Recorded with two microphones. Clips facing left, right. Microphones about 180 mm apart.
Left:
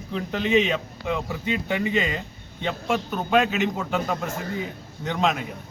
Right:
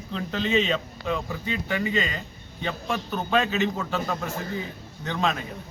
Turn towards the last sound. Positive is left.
turn(degrees=15)  # may be behind; listen again after turning